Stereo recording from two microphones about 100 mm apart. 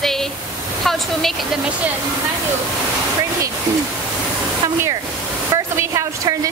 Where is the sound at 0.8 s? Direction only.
Centre (ahead or behind).